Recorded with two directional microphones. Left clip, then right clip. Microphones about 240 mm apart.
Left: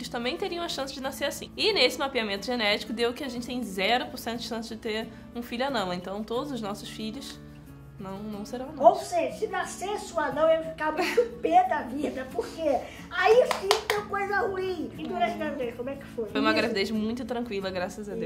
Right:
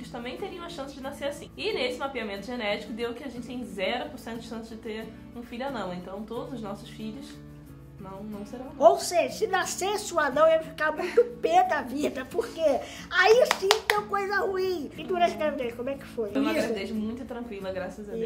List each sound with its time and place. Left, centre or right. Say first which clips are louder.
0.1 s a woman's voice: left 5 dB; left
9.1 s a child's voice: right 3 dB; right
16.3 s a woman's voice: left 3 dB; left